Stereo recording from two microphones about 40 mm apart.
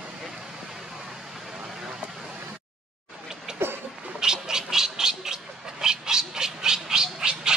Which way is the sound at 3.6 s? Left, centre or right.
Right.